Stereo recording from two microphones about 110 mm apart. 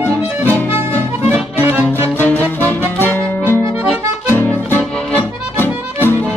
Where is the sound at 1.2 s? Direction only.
15° right (ahead or behind).